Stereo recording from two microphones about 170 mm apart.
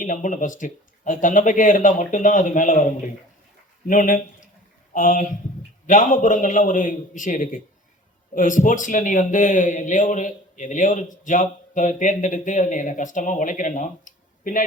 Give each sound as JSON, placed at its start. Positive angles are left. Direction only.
{"t": 0.0, "sound": "a man's voice", "side_deg": 50}
{"t": 3.8, "sound": "a man's voice", "side_deg": 50}